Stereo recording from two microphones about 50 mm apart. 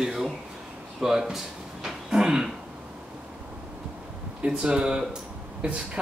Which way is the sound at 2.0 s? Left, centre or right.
Centre.